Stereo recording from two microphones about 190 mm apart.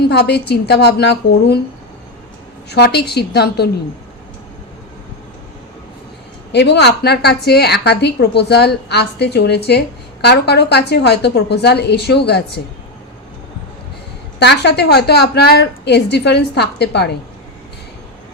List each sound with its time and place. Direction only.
0.0 s a woman's voice: 60° left (ahead or behind)
2.6 s a woman's voice: 60° left (ahead or behind)
6.5 s a woman's voice: 65° left (ahead or behind)
14.3 s a woman's voice: 65° left (ahead or behind)